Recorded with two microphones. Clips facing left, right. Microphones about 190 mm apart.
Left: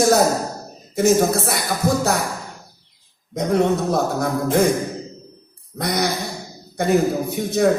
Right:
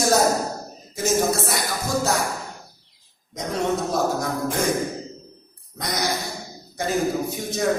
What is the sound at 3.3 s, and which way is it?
Speech, 60° left (ahead or behind).